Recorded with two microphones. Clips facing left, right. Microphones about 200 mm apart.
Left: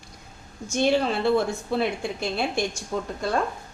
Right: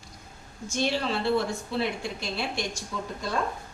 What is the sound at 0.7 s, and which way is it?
A woman's voice, 50° left (ahead or behind).